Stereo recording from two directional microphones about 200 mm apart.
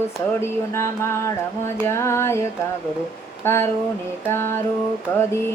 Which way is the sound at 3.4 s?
10° left (ahead or behind).